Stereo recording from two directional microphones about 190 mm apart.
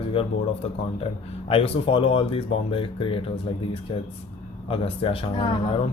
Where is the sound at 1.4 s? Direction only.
30° left (ahead or behind).